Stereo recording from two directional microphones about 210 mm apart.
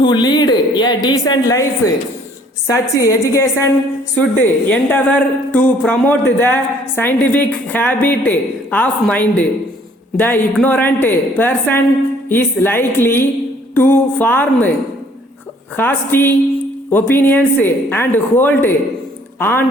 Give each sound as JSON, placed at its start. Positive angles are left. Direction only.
{"t": 0.0, "sound": "speech", "side_deg": 20}
{"t": 2.6, "sound": "a woman's voice", "side_deg": 15}
{"t": 15.7, "sound": "a woman's voice", "side_deg": 10}